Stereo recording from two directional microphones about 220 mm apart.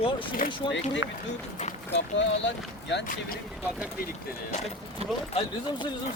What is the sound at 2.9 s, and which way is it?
Speech, 40° left (ahead or behind).